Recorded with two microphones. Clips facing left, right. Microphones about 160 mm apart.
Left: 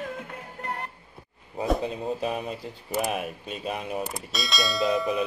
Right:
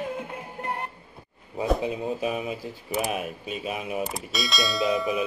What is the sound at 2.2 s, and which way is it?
Speech, 5° right (ahead or behind).